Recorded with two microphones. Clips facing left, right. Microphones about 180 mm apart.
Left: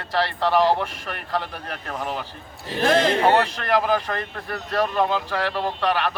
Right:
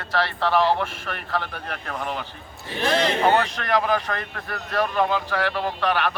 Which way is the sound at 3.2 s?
5° left (ahead or behind).